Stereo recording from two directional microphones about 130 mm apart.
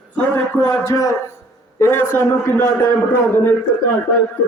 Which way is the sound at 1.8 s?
20° left (ahead or behind).